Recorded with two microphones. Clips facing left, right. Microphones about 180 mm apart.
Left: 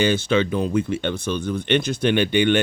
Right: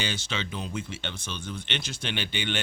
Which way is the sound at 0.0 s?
55° left (ahead or behind).